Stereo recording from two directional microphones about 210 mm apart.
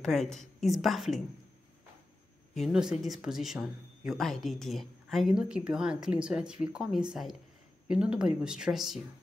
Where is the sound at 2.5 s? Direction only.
Centre (ahead or behind).